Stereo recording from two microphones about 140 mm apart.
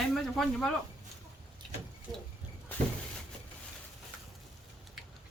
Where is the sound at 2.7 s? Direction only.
10° left (ahead or behind).